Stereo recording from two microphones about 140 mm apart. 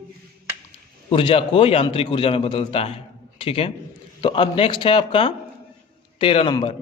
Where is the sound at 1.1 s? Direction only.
40° left (ahead or behind).